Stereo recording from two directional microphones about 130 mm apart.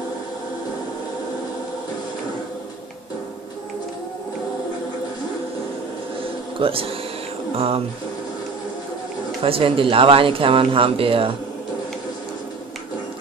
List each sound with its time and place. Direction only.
6.6 s speech: 45° right (ahead or behind)
9.4 s speech: 45° right (ahead or behind)